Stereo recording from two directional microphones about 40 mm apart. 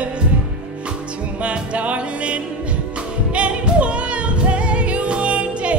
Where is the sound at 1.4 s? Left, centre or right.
Right.